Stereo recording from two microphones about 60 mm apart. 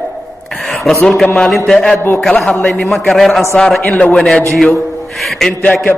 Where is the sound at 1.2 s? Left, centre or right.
Centre.